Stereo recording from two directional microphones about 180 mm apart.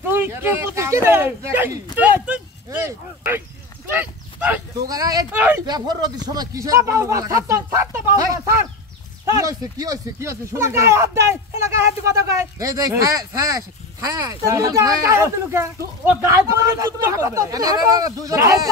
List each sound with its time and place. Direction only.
0.1 s speech: 10° right (ahead or behind)
2.0 s a sound: 10° right (ahead or behind)
2.9 s livestock: 10° right (ahead or behind)
4.8 s speech: 20° right (ahead or behind)
5.7 s speech: 20° right (ahead or behind)